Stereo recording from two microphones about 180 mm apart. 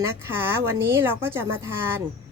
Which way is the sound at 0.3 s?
10° right (ahead or behind).